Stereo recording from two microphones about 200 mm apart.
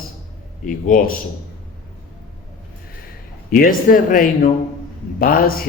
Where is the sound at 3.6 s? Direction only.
45° left (ahead or behind).